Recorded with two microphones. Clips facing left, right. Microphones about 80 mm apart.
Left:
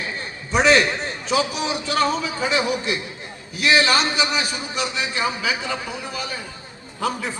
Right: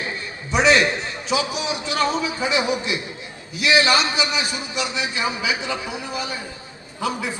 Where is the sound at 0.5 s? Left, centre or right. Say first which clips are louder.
Even; left.